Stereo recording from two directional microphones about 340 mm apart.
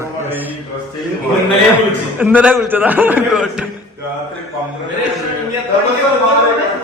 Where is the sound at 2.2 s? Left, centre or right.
Centre.